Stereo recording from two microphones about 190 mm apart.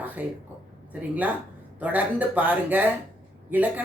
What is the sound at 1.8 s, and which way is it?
Speech, 10° right (ahead or behind).